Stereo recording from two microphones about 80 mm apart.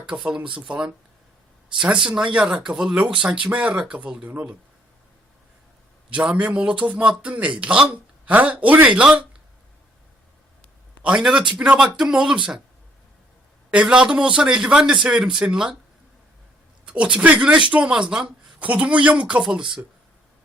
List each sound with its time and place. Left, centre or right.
0.0 s a man's voice: centre
6.1 s a man's voice: centre
11.0 s a man's voice: centre
13.7 s a man's voice: centre
16.8 s a man's voice: centre